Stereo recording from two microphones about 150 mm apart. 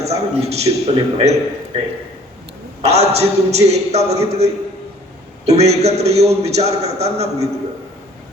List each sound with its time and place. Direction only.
0.0 s a man's voice: 45° right (ahead or behind)
2.8 s a man's voice: 45° right (ahead or behind)